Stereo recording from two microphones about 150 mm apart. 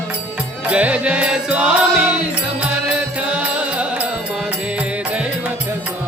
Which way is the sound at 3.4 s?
10° right (ahead or behind).